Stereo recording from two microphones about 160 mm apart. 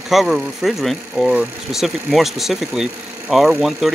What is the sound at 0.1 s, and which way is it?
Speech, centre (ahead or behind).